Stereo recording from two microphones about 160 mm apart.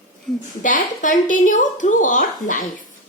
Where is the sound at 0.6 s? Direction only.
55° left (ahead or behind).